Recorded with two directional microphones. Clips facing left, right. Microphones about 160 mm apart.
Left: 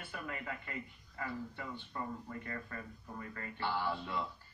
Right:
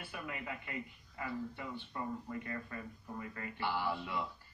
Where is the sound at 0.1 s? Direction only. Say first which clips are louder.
Left 1 dB; 20° right (ahead or behind).